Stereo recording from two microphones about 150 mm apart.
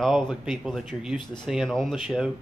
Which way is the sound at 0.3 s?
Centre (ahead or behind).